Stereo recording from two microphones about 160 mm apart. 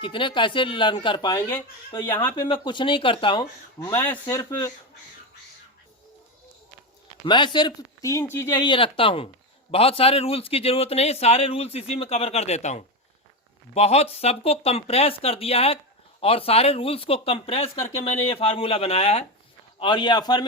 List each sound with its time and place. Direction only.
0.0 s speech: 30° left (ahead or behind)
1.9 s speech: 15° left (ahead or behind)
2.3 s speech: 30° left (ahead or behind)
3.9 s speech: 15° left (ahead or behind)
7.3 s speech: 30° left (ahead or behind)
8.5 s speech: 30° left (ahead or behind)
17.7 s speech: 15° left (ahead or behind)
18.2 s speech: 35° left (ahead or behind)